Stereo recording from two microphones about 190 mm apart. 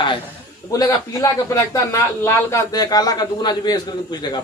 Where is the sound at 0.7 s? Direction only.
20° left (ahead or behind).